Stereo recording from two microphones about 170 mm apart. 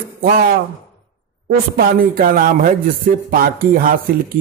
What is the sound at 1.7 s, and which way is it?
A man's voice, 55° right (ahead or behind).